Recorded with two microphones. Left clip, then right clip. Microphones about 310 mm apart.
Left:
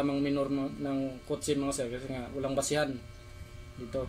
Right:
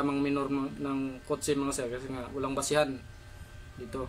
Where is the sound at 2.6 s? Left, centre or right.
Right.